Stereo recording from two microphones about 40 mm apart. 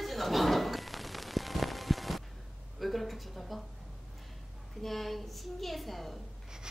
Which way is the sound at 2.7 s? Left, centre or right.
Centre.